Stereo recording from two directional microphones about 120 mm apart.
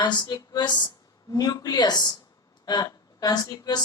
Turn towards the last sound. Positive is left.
turn(degrees=35)  # may be behind; listen again after turning